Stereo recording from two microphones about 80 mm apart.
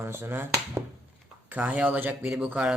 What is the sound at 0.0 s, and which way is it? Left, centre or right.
Speech, right.